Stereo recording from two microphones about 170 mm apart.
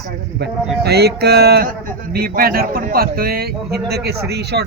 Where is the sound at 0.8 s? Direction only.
70° right (ahead or behind).